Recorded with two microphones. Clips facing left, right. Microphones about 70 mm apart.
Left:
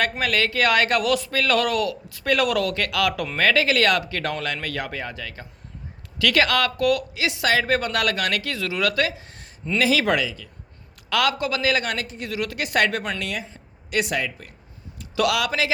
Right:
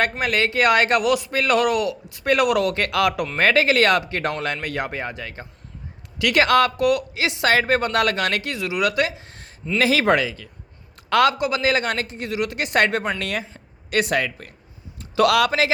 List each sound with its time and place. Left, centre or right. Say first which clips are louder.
0.2 s speech: right 2 dB; right
11.1 s a man's voice: right 5 dB; right
11.3 s speech: right 2 dB; right
13.9 s speech: right 3 dB; right
14.9 s a sound: right 4 dB; right
15.3 s speech: right 5 dB; right